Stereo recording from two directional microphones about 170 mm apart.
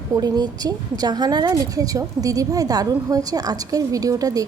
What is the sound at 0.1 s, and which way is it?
A woman's voice, 25° right (ahead or behind).